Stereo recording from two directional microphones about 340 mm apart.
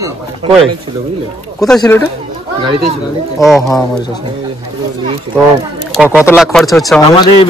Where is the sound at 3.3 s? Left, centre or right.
Centre.